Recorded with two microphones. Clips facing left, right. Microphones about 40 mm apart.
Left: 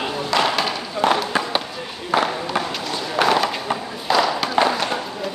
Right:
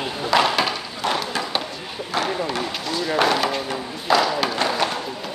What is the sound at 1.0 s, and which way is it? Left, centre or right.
Run, left.